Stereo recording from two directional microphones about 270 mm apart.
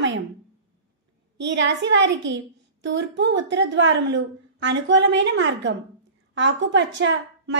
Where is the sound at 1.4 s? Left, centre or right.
Right.